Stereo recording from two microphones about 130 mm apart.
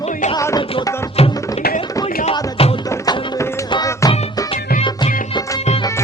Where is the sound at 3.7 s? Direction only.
30° left (ahead or behind).